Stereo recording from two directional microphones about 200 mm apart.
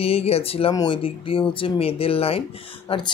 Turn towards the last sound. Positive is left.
turn(degrees=25)  # may be behind; listen again after turning